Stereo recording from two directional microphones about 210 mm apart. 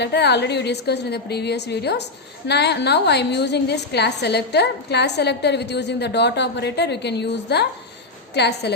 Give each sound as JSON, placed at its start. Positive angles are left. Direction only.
{"t": 0.0, "sound": "a woman's voice", "side_deg": 55}